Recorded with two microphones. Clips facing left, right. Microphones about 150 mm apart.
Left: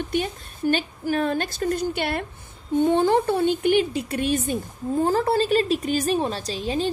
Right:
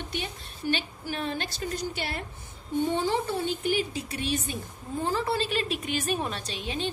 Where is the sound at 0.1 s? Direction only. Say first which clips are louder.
Left 9 dB; 45° left (ahead or behind).